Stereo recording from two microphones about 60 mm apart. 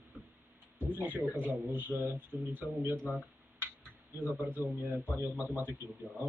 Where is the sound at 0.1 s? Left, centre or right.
Right.